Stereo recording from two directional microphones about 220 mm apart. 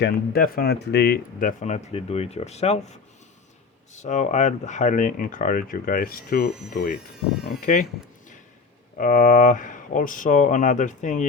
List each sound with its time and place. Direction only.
0.0 s speech: 40° left (ahead or behind)
6.9 s speech: centre (ahead or behind)
7.6 s speech: 40° left (ahead or behind)
9.0 s speech: 40° left (ahead or behind)